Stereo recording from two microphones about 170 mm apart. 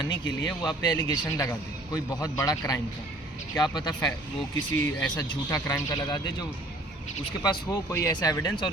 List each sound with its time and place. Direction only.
0.0 s a man's voice: 25° left (ahead or behind)
7.4 s a man's voice: 25° left (ahead or behind)